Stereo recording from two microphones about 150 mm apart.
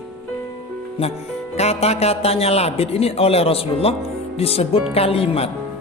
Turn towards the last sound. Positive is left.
turn(degrees=40)  # may be behind; listen again after turning